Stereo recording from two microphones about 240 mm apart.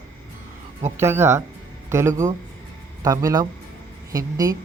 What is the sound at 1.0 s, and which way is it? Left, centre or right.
Speech, centre.